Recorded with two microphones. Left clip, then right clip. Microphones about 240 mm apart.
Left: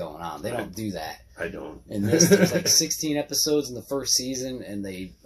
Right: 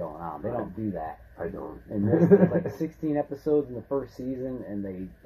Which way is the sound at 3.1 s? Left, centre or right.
Left.